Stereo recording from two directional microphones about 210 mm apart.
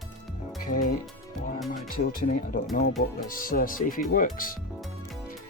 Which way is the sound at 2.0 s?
45° left (ahead or behind).